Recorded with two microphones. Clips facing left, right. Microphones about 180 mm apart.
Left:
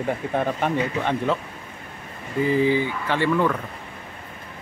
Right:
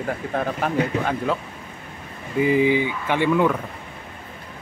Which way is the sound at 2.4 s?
15° right (ahead or behind).